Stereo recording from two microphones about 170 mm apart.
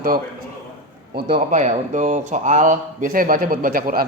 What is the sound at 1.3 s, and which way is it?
Speech, 45° right (ahead or behind).